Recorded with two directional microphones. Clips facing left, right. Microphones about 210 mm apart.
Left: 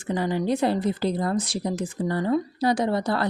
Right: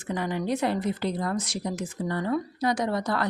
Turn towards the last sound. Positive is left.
turn(degrees=30)  # may be behind; listen again after turning